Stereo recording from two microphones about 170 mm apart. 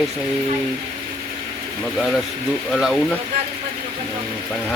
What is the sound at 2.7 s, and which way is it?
Speech, centre (ahead or behind).